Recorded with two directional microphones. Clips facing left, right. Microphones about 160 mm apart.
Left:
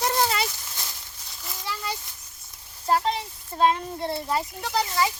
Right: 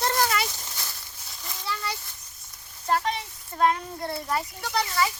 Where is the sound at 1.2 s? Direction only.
Centre (ahead or behind).